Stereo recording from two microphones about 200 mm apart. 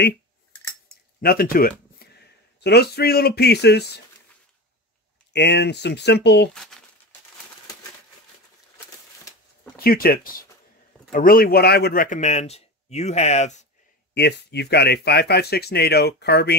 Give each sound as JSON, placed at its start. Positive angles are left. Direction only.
{"t": 1.2, "sound": "speech", "side_deg": 45}
{"t": 5.3, "sound": "speech", "side_deg": 55}
{"t": 9.8, "sound": "speech", "side_deg": 50}
{"t": 14.1, "sound": "speech", "side_deg": 55}